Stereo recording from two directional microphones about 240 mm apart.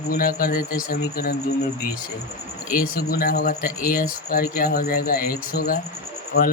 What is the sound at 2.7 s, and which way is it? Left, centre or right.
Speech, left.